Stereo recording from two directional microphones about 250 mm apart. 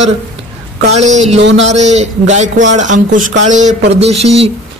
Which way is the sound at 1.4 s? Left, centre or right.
Right.